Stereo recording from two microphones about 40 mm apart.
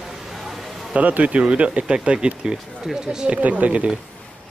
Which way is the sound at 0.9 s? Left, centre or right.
Right.